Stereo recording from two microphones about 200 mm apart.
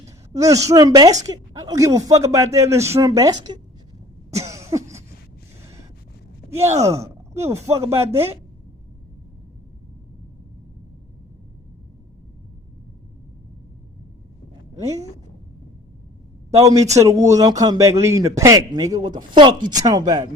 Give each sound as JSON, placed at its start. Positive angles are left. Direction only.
{"t": 0.0, "sound": "a woman's voice", "side_deg": -15}
{"t": 4.4, "sound": "cough", "side_deg": -15}
{"t": 6.7, "sound": "a woman's voice", "side_deg": -15}
{"t": 16.6, "sound": "a woman's voice", "side_deg": -15}